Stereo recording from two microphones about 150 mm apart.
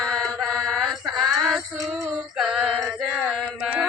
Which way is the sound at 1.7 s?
25° right (ahead or behind).